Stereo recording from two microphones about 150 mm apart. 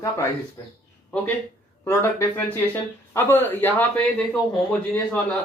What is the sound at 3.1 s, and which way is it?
Speech, 15° left (ahead or behind).